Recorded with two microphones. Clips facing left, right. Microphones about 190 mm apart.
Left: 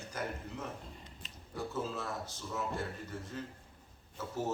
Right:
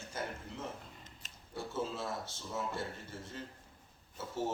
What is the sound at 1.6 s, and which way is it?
Speech, 25° right (ahead or behind).